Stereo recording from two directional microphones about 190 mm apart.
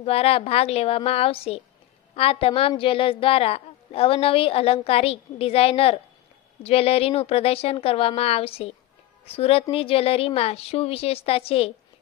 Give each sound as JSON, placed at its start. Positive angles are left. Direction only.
{"t": 0.0, "sound": "a woman's voice", "side_deg": 30}